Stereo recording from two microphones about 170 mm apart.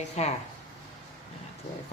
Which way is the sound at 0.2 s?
40° left (ahead or behind).